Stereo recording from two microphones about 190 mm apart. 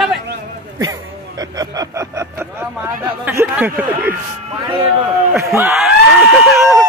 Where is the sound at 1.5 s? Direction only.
20° right (ahead or behind).